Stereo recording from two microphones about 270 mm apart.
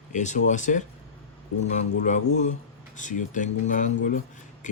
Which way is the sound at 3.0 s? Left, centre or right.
Left.